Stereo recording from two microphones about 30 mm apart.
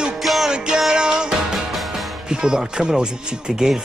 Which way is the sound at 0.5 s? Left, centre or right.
Right.